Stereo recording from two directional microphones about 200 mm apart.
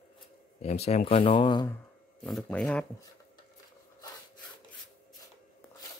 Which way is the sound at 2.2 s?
Centre (ahead or behind).